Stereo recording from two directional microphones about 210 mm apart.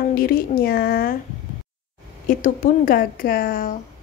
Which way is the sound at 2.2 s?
40° left (ahead or behind).